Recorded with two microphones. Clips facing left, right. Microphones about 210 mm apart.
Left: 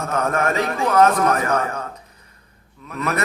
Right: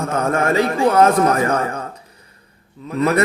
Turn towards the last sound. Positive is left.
turn(degrees=-30)  # may be behind; listen again after turning